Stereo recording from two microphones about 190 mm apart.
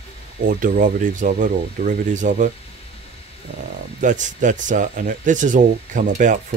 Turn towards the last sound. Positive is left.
turn(degrees=-40)  # may be behind; listen again after turning